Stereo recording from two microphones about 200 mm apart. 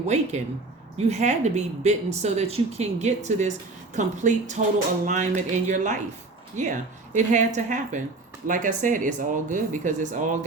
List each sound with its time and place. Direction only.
0.1 s speech: 35° right (ahead or behind)